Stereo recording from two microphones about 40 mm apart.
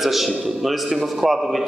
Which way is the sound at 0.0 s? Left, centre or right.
Centre.